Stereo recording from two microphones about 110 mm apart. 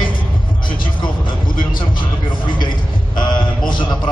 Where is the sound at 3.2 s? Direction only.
45° left (ahead or behind).